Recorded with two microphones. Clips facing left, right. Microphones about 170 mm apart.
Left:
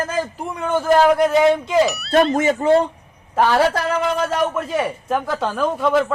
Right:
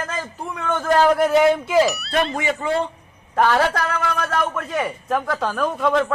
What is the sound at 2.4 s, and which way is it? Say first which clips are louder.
Speech: left 7 dB; 40° left (ahead or behind).